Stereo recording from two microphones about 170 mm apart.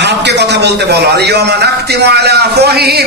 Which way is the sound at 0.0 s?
85° right.